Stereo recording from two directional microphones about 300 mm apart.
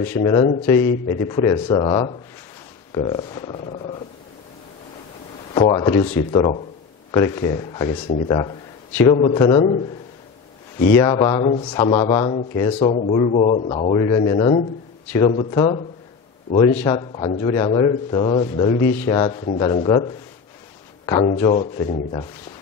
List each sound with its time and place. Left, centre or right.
0.0 s a man's voice: centre
5.5 s a man's voice: centre
10.8 s a man's voice: centre